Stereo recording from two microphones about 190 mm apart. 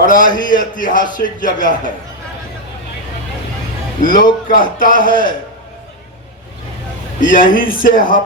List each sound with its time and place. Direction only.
0.1 s a man's voice: 45° left (ahead or behind)
4.1 s a man's voice: 45° left (ahead or behind)
7.2 s a man's voice: 45° left (ahead or behind)